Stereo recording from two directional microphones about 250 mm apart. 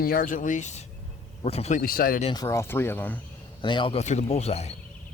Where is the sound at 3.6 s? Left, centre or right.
Centre.